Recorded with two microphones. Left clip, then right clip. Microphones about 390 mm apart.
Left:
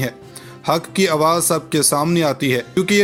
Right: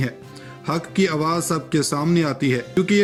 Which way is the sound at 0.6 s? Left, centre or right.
Centre.